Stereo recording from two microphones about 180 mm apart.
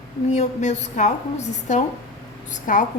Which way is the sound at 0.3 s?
40° left (ahead or behind).